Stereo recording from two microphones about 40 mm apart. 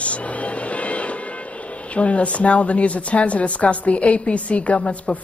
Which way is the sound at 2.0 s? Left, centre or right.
Left.